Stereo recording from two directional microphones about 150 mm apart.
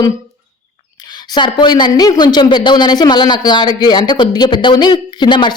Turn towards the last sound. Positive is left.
turn(degrees=30)  # may be behind; listen again after turning